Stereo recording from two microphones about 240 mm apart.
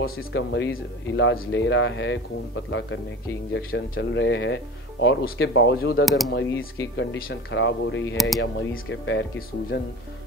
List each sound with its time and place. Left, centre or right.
0.0 s speech: left
6.0 s speech: centre
7.0 s speech: left